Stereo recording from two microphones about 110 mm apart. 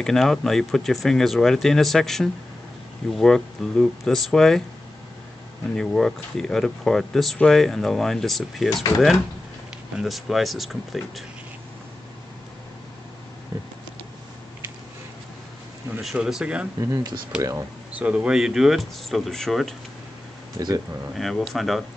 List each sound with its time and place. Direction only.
0.0 s speech: 5° left (ahead or behind)
5.8 s speech: 5° left (ahead or behind)
16.0 s speech: 5° right (ahead or behind)
16.8 s speech: 35° right (ahead or behind)
17.9 s speech: 10° right (ahead or behind)
20.5 s speech: 30° right (ahead or behind)
21.1 s speech: centre (ahead or behind)